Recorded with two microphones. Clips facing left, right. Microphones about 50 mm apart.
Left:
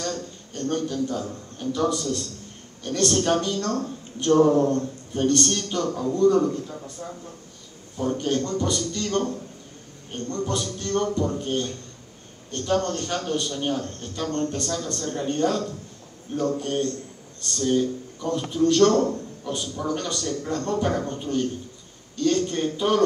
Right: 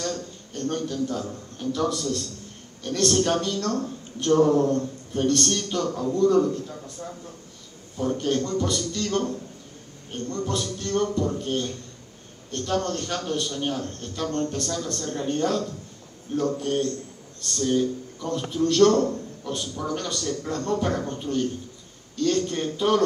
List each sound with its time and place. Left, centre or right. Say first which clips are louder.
0.6 s a man's voice: left 1 dB; centre
18.9 s a man's voice: left 1 dB; centre
19.4 s a man's voice: left 2 dB; centre